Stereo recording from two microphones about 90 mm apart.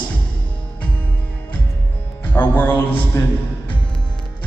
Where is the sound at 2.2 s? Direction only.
20° left (ahead or behind).